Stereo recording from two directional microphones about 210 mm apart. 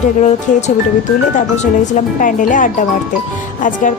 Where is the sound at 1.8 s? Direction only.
35° left (ahead or behind).